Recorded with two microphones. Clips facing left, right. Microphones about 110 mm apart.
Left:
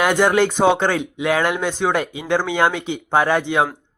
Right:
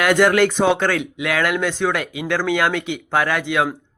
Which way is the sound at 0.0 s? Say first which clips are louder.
Right 1 dB; 20° left (ahead or behind).